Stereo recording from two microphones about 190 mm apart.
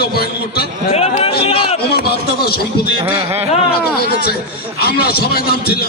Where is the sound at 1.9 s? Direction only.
55° left (ahead or behind).